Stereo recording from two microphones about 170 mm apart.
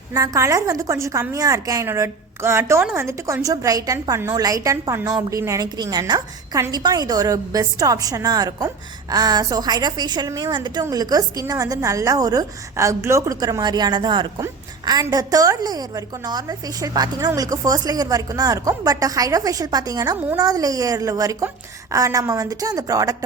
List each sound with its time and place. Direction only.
0.1 s a woman's voice: 20° right (ahead or behind)
20.1 s a woman's voice: 10° right (ahead or behind)
20.4 s a woman's voice: 20° right (ahead or behind)